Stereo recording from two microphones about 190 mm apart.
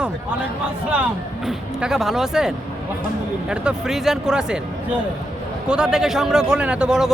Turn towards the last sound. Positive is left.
turn(degrees=-5)  # may be behind; listen again after turning